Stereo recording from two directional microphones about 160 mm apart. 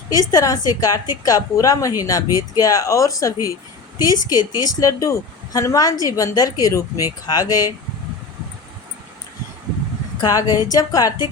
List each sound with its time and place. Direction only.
0.1 s speech: 20° left (ahead or behind)
10.2 s speech: 20° left (ahead or behind)